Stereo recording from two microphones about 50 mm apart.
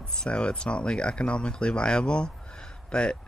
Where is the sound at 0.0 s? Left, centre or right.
Centre.